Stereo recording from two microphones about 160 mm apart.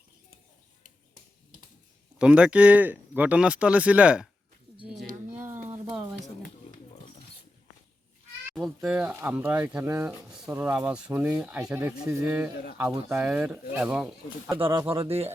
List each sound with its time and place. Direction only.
2.1 s speech: 5° right (ahead or behind)
5.6 s a sound: 15° right (ahead or behind)
8.5 s speech: centre (ahead or behind)
14.5 s speech: 30° right (ahead or behind)